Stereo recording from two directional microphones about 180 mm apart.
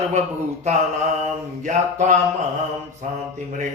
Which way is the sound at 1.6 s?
40° right (ahead or behind).